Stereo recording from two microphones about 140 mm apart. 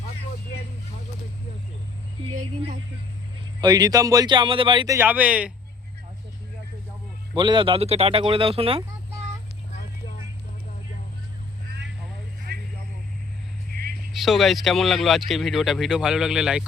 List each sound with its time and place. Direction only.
3.6 s speech: 30° right (ahead or behind)
4.9 s speech: 15° right (ahead or behind)
7.3 s speech: 35° right (ahead or behind)
14.1 s speech: centre (ahead or behind)